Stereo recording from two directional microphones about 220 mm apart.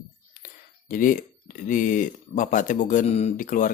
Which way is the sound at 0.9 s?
40° left (ahead or behind).